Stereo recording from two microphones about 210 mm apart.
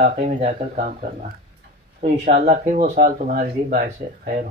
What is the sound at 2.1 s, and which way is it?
Speech, 35° right (ahead or behind).